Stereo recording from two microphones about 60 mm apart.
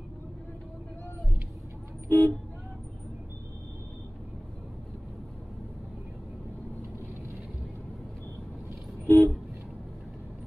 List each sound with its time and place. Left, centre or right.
2.0 s vehicle: left
9.0 s vehicle: left